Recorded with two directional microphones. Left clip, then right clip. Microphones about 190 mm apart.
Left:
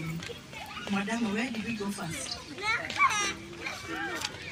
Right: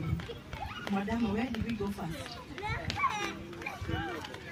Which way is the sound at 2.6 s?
20° right (ahead or behind).